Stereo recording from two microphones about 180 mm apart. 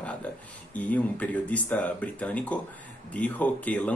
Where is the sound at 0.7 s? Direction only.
10° left (ahead or behind).